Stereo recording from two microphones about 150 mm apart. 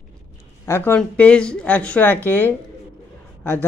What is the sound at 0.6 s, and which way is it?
Speech, 15° left (ahead or behind).